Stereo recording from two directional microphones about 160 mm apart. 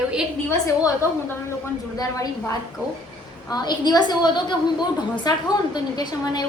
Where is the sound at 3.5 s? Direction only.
25° left (ahead or behind).